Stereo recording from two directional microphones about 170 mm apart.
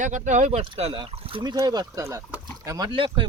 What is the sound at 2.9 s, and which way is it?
Speech, 30° right (ahead or behind).